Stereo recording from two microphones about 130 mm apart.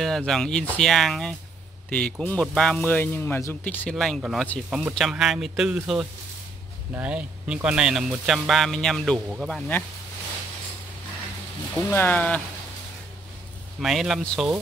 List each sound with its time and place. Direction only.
0.0 s speech: 5° left (ahead or behind)
3.9 s speech: centre (ahead or behind)
7.0 s speech: 10° right (ahead or behind)
9.6 s speech: 15° left (ahead or behind)
11.9 s speech: 15° left (ahead or behind)
13.7 s speech: centre (ahead or behind)